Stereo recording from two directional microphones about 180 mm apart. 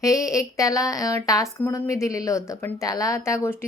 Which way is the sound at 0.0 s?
20° left (ahead or behind).